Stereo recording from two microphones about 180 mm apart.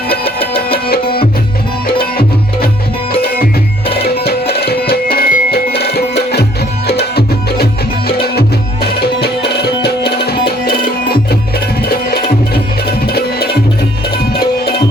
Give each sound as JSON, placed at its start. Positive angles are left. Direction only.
{"t": 0.9, "sound": "music", "side_deg": 60}